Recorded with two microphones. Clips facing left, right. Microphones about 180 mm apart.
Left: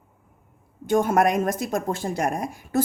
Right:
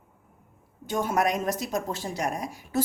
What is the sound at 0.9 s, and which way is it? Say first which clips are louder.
Speech: left 6 dB; 50° left (ahead or behind).